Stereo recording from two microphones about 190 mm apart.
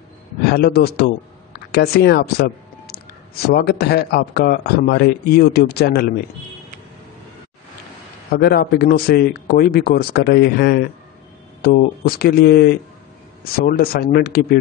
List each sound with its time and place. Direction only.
0.5 s speech: 55° left (ahead or behind)
8.3 s speech: 55° left (ahead or behind)